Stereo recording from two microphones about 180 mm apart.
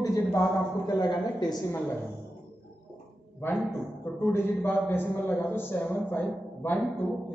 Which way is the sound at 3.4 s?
10° left (ahead or behind).